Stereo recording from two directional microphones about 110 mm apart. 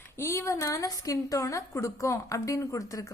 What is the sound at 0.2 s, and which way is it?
A woman's voice, 25° left (ahead or behind).